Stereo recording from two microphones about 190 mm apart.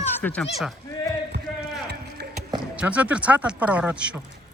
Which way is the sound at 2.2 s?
60° right (ahead or behind).